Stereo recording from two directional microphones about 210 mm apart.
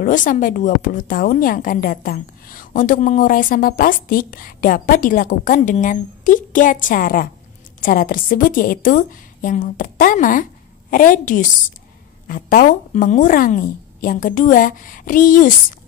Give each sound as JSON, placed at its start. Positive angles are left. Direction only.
{"t": 0.0, "sound": "a woman's voice", "side_deg": 40}